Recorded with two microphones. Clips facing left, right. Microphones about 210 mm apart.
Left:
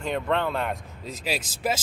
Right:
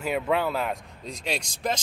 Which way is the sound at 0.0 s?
5° right (ahead or behind).